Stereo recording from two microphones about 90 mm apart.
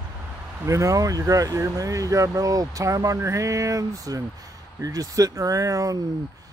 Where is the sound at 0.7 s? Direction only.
35° right (ahead or behind).